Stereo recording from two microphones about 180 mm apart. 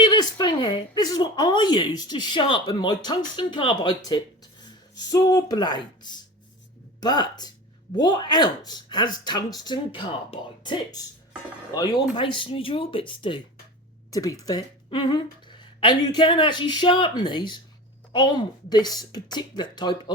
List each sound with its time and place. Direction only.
0.0 s speech: 25° left (ahead or behind)